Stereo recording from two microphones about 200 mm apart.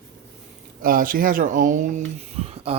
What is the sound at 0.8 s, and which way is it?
Speech, 45° right (ahead or behind).